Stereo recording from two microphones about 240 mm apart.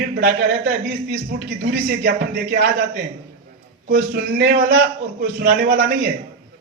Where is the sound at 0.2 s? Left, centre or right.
Right.